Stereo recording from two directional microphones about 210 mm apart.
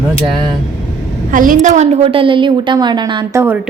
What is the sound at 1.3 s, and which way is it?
A woman's voice, 40° right (ahead or behind).